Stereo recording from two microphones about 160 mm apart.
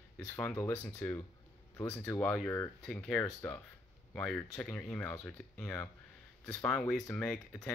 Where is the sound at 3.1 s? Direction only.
15° left (ahead or behind).